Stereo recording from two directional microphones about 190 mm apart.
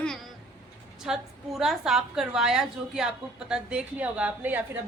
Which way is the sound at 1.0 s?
Centre (ahead or behind).